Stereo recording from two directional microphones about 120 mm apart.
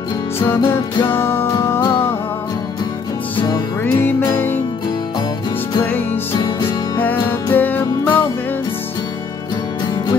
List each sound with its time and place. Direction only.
1.0 s music: 20° left (ahead or behind)
3.3 s music: 35° left (ahead or behind)
3.8 s music: 15° left (ahead or behind)
6.3 s music: 40° left (ahead or behind)
7.5 s music: 15° left (ahead or behind)